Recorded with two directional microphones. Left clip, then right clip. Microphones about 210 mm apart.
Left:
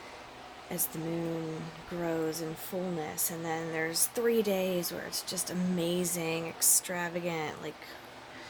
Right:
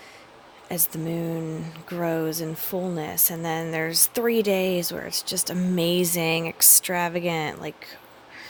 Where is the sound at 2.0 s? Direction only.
50° right (ahead or behind).